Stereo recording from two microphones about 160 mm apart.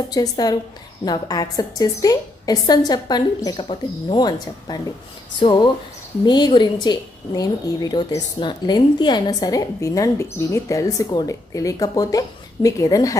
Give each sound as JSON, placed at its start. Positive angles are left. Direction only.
{"t": 0.1, "sound": "a woman's voice", "side_deg": 25}